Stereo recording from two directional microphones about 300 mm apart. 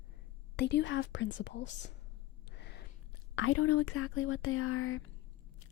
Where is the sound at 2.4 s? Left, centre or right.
Left.